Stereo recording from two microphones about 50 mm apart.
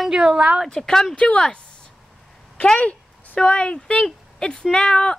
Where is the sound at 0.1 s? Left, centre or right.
Centre.